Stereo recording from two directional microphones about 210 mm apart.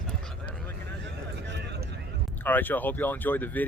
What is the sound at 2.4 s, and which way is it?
Speech, 10° left (ahead or behind).